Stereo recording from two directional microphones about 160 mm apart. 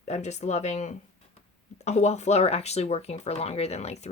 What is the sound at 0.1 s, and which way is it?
Speech, 45° left (ahead or behind).